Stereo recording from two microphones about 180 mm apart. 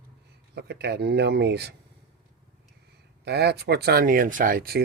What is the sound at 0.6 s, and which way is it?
Speech, 65° right (ahead or behind).